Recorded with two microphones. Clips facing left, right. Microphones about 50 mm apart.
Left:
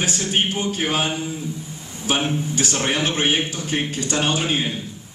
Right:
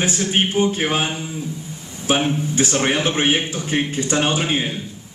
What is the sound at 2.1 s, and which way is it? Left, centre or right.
A man's voice, right.